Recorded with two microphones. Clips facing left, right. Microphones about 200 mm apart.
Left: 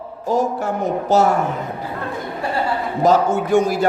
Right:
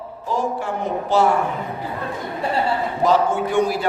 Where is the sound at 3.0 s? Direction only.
45° left (ahead or behind).